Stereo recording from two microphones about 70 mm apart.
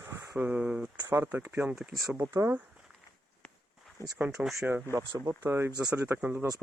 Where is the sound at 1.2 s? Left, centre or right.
Right.